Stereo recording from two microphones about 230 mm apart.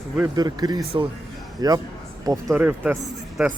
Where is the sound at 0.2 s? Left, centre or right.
Centre.